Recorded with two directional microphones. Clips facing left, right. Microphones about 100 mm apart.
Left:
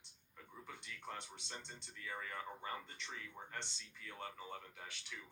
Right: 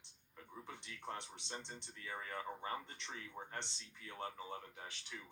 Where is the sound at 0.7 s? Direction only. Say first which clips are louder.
Right 2 dB; 20° right (ahead or behind).